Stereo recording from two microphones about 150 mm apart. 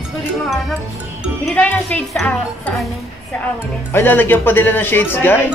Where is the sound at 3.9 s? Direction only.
15° left (ahead or behind).